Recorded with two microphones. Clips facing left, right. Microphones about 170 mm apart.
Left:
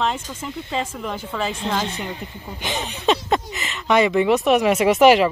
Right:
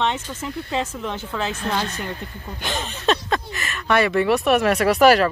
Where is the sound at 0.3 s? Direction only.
5° left (ahead or behind).